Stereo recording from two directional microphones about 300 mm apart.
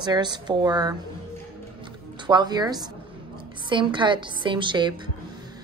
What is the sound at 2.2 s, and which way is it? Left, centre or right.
A woman's voice, centre.